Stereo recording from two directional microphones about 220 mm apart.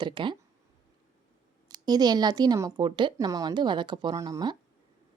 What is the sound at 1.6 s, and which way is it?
A woman's voice, 20° right (ahead or behind).